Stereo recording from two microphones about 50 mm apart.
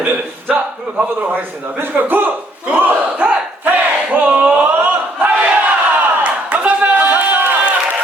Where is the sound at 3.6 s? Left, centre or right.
Right.